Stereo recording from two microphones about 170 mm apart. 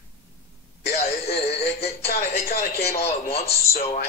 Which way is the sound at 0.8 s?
70° left (ahead or behind).